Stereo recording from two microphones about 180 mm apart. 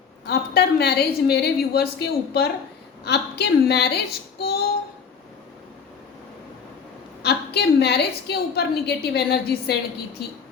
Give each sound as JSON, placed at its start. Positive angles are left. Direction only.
{"t": 0.3, "sound": "a woman's voice", "side_deg": 60}
{"t": 7.2, "sound": "a woman's voice", "side_deg": 65}